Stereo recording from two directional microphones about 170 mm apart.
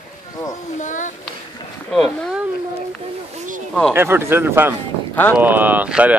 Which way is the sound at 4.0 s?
15° right (ahead or behind).